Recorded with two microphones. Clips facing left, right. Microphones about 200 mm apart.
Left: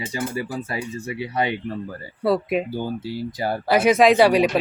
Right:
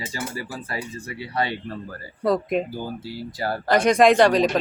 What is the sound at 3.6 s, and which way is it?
Speech, 5° left (ahead or behind).